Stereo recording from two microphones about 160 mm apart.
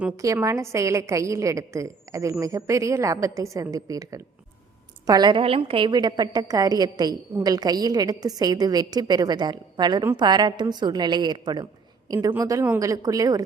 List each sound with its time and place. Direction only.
0.4 s a woman's voice: 20° right (ahead or behind)